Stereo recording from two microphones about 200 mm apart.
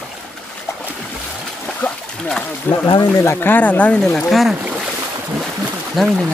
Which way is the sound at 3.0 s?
15° left (ahead or behind).